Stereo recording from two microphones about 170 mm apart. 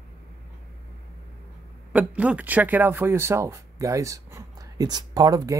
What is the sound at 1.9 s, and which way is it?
Speech, 10° right (ahead or behind).